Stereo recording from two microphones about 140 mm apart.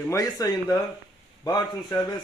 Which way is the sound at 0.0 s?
25° left (ahead or behind).